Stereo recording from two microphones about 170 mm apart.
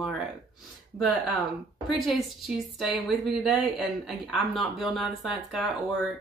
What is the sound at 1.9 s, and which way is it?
Speech, centre (ahead or behind).